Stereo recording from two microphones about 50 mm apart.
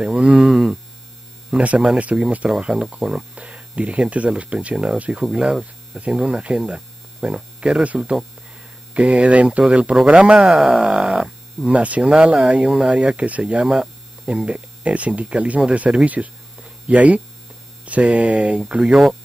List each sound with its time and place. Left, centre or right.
0.0 s speech: centre
1.5 s speech: right
2.7 s speech: centre
5.2 s speech: centre
10.4 s speech: centre
11.6 s speech: right